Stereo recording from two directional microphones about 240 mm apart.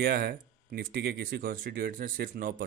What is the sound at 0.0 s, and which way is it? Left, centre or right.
Speech, right.